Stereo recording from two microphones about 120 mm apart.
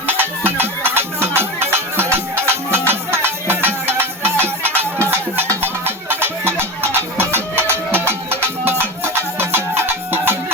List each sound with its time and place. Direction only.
0.1 s music: 15° right (ahead or behind)